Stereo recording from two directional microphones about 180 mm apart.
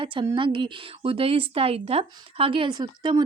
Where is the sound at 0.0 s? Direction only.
30° right (ahead or behind).